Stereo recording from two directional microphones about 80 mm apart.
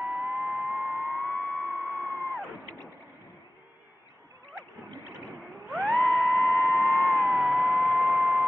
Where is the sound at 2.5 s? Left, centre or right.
Left.